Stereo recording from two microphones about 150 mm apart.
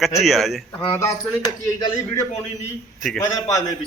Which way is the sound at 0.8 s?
25° left (ahead or behind).